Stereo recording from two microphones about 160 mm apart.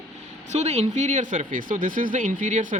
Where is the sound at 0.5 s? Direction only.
45° right (ahead or behind).